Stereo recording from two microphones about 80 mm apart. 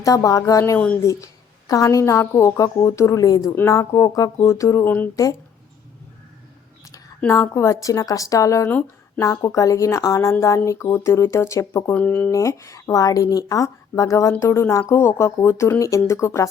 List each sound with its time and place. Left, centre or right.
0.0 s a woman's voice: left
3.2 s a woman's voice: left
3.5 s a woman's voice: left
7.3 s a woman's voice: left
11.9 s speech: centre
12.3 s a woman's voice: left